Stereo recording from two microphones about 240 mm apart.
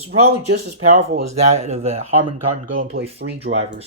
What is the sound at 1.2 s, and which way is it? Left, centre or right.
Speech, right.